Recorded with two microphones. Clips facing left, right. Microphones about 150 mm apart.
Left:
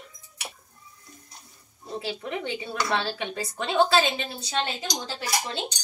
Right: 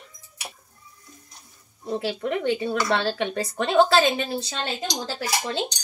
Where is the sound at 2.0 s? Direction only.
65° right (ahead or behind).